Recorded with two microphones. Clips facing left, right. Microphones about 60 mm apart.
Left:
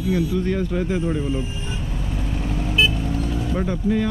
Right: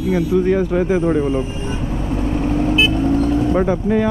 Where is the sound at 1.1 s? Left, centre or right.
Right.